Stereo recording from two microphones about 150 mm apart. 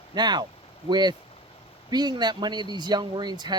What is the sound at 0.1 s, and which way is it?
Speech, 30° right (ahead or behind).